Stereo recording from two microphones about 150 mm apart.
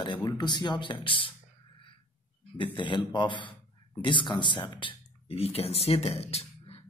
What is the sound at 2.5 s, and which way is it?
Speech, 35° left (ahead or behind).